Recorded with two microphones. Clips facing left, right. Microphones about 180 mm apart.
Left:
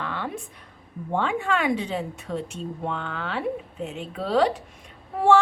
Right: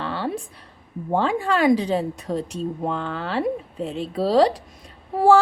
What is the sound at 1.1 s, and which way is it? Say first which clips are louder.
Speech: right 4 dB; 35° right (ahead or behind).